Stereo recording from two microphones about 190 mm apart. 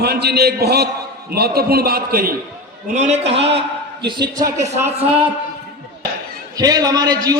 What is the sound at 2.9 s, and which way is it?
A man's voice, 35° right (ahead or behind).